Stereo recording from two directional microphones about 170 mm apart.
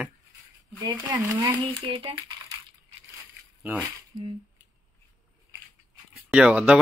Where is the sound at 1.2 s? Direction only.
20° right (ahead or behind).